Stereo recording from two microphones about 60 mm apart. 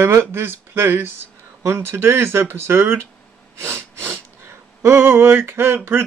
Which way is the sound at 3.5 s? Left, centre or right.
Right.